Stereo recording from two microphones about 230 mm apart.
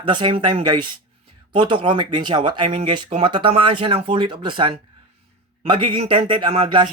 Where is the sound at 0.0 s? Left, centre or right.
Right.